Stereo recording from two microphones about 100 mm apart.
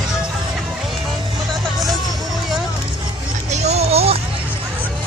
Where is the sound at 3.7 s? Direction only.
90° right.